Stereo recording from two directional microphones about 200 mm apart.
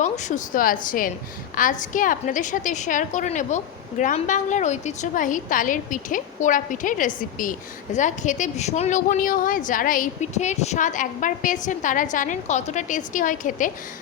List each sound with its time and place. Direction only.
0.0 s a woman's voice: 35° left (ahead or behind)